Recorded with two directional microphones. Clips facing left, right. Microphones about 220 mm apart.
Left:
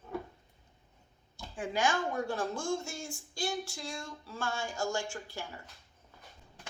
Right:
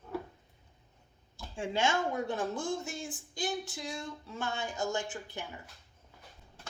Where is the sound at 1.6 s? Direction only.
25° right (ahead or behind).